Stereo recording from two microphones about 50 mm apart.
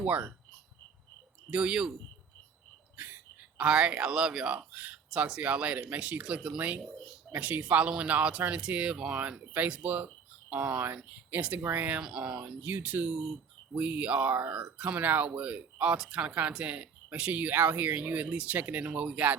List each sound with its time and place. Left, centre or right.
0.0 s speech: right
1.5 s speech: centre
2.9 s a sound: right
3.6 s speech: centre
4.5 s speech: right
5.1 s speech: centre
5.4 s speech: right
6.8 s speech: centre
7.3 s speech: right
12.0 s speech: centre
12.6 s speech: right
16.0 s speech: centre